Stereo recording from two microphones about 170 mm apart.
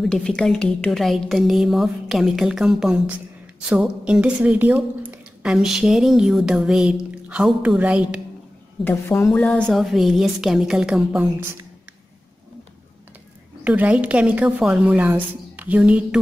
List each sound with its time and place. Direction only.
0.0 s a woman's voice: centre (ahead or behind)
8.8 s a woman's voice: 15° left (ahead or behind)
9.3 s a woman's voice: 5° left (ahead or behind)
13.7 s a woman's voice: 10° right (ahead or behind)